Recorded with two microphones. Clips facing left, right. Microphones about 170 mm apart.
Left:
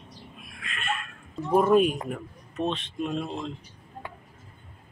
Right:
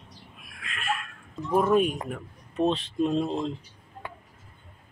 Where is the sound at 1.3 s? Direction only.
10° left (ahead or behind).